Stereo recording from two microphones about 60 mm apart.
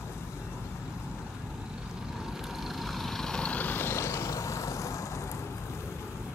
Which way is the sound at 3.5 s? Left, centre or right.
Left.